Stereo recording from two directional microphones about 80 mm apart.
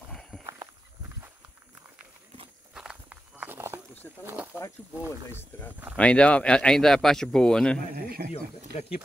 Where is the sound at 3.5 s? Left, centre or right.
Right.